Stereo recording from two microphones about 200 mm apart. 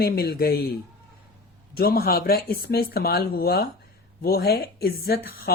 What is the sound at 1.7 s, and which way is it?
Speech, 50° left (ahead or behind).